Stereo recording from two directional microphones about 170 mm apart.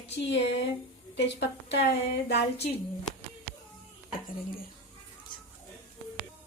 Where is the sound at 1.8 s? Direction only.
80° left.